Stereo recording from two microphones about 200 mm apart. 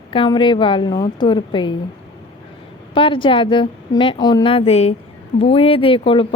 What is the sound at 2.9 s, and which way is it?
Speech, 25° left (ahead or behind).